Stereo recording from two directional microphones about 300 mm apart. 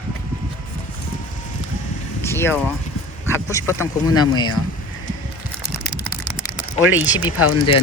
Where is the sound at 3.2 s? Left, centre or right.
Centre.